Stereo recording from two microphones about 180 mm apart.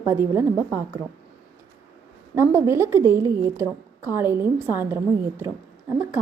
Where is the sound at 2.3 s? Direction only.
15° right (ahead or behind).